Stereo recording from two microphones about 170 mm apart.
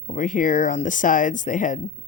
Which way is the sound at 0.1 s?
50° left (ahead or behind).